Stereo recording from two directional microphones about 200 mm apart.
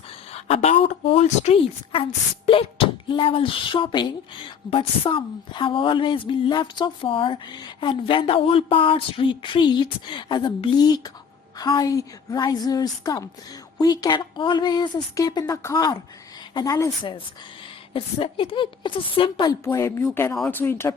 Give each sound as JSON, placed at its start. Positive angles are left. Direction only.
{"t": 0.4, "sound": "speech", "side_deg": 30}